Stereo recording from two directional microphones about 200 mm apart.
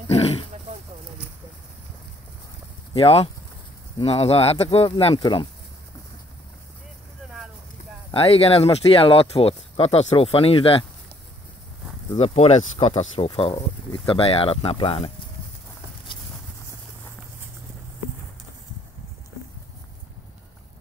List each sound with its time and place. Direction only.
0.1 s roaring cats: 30° left (ahead or behind)
2.9 s speech: 30° left (ahead or behind)
8.1 s speech: 30° left (ahead or behind)
12.2 s speech: 30° left (ahead or behind)